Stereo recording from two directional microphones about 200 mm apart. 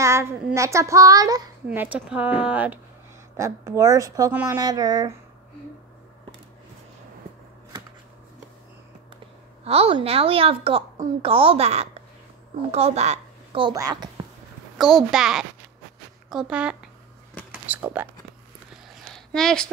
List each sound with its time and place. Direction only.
0.0 s a child's voice: 15° right (ahead or behind)
9.7 s a woman's voice: 30° right (ahead or behind)
15.0 s speech: 5° right (ahead or behind)
17.5 s a sound: 10° right (ahead or behind)
19.1 s speech: 5° left (ahead or behind)